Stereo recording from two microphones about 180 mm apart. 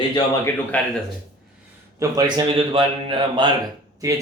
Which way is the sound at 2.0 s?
20° right (ahead or behind).